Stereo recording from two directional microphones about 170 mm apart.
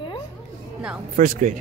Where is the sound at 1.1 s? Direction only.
50° right (ahead or behind).